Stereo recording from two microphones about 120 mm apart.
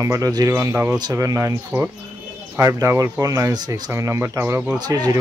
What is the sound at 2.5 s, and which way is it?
Speech, 25° right (ahead or behind).